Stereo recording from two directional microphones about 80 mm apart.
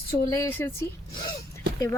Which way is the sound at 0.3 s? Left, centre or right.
Left.